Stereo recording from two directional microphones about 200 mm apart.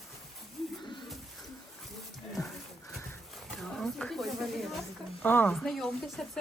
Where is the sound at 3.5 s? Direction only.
5° left (ahead or behind).